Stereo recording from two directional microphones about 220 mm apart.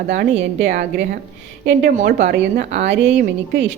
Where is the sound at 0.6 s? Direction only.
35° right (ahead or behind).